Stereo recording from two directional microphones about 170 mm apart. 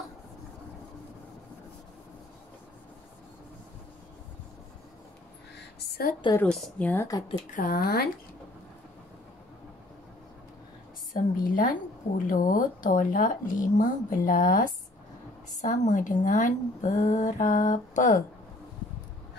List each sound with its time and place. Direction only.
5.6 s a sound: 70° left (ahead or behind)
6.3 s speech: 10° left (ahead or behind)
7.5 s speech: 60° left (ahead or behind)
11.5 s a woman's voice: 55° left (ahead or behind)